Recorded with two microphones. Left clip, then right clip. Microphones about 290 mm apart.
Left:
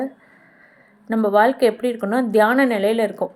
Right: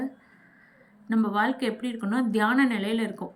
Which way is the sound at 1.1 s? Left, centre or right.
Centre.